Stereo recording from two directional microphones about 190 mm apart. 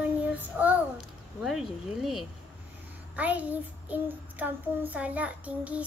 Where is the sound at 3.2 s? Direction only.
10° right (ahead or behind).